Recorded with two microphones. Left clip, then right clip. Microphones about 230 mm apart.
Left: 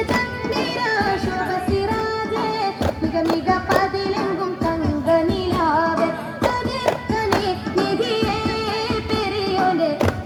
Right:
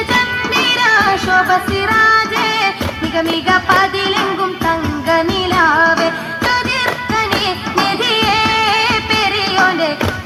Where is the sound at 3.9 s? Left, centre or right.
Right.